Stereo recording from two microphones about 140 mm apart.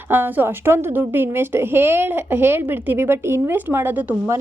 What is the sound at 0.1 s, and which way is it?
Speech, 15° right (ahead or behind).